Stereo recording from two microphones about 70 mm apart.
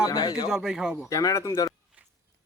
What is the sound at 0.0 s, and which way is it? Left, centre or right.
Speech, left.